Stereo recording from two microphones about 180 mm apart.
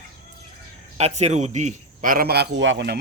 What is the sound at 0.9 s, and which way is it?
A man's voice, 35° right (ahead or behind).